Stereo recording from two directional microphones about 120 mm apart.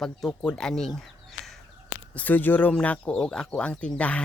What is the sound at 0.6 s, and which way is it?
Bird, 5° left (ahead or behind).